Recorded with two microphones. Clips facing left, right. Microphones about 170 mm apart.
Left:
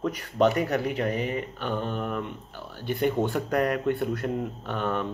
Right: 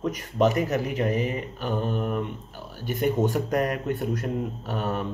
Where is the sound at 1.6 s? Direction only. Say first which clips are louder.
Right 5 dB; 40° right (ahead or behind).